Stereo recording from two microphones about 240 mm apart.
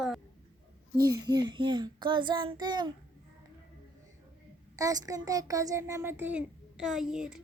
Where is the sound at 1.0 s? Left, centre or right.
Centre.